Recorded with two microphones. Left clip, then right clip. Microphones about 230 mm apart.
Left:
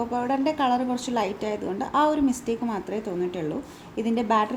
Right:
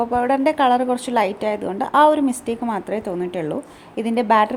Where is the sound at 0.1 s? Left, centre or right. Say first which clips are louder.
Right 7 dB; right.